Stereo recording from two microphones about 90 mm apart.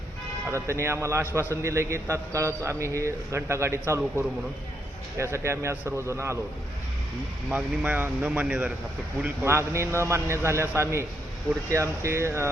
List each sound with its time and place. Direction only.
0.5 s a man's voice: 30° right (ahead or behind)
5.1 s a man's voice: 30° right (ahead or behind)
7.5 s a man's voice: 15° right (ahead or behind)
9.4 s a man's voice: 30° right (ahead or behind)